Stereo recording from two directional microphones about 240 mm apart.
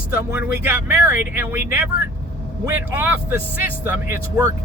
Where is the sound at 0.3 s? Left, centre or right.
Centre.